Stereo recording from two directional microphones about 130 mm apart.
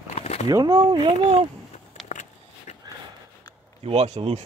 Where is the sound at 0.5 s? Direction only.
25° right (ahead or behind).